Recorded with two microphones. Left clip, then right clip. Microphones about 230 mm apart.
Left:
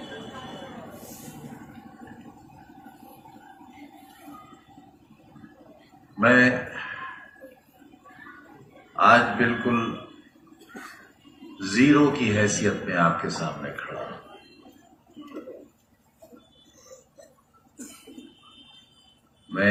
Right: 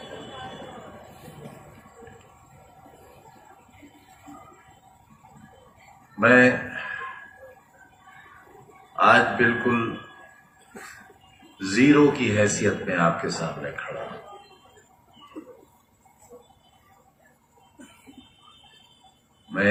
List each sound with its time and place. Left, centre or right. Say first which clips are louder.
6.1 s a sound: right 2 dB; right
9.0 s a man's voice: even; right
11.6 s speech: right 2 dB; right